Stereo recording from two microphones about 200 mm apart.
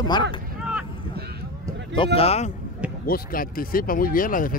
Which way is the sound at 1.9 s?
25° left (ahead or behind).